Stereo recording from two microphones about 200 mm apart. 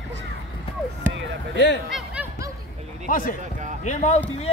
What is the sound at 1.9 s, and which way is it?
Snicker, 10° right (ahead or behind).